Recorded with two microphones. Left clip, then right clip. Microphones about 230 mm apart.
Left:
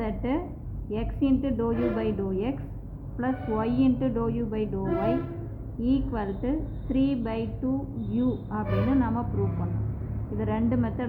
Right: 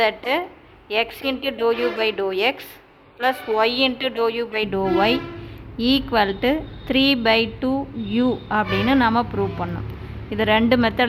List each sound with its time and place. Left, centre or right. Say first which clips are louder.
0.0 s a woman's voice: right 10 dB; right
10.3 s a woman's voice: right 12 dB; right